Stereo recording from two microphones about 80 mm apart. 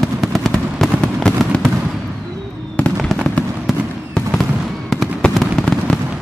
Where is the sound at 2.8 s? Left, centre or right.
Centre.